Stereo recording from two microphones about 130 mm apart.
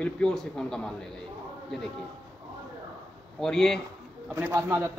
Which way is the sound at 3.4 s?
5° left (ahead or behind).